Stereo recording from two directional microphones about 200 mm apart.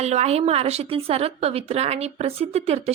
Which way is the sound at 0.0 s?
35° right (ahead or behind).